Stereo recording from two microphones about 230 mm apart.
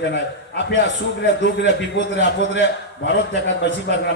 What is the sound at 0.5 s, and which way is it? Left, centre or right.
A man's voice, left.